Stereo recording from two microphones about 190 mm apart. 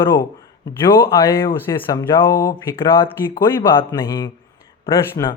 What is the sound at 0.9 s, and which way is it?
Speech, 15° left (ahead or behind).